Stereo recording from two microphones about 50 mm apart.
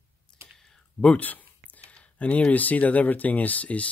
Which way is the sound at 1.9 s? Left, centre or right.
Left.